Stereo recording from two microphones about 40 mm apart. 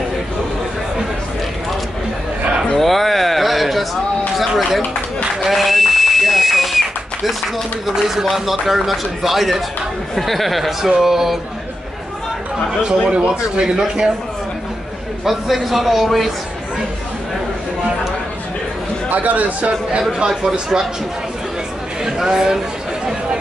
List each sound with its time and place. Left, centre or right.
2.7 s a sound: centre
4.4 s speech: centre
5.4 s a sound: centre
8.1 s speech: centre
12.8 s a man's voice: right
15.2 s speech: centre
19.1 s a man's voice: right
20.0 s speech: centre
22.0 s speech: centre